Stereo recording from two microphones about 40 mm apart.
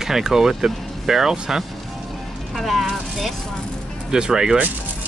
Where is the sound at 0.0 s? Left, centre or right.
Centre.